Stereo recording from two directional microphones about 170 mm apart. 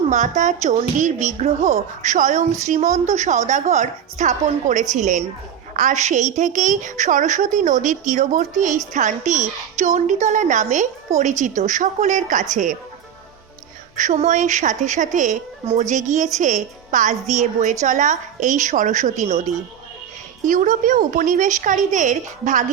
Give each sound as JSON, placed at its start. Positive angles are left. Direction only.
{"t": 0.1, "sound": "a woman's voice", "side_deg": -45}
{"t": 13.9, "sound": "a woman's voice", "side_deg": -45}
{"t": 20.4, "sound": "a woman's voice", "side_deg": -50}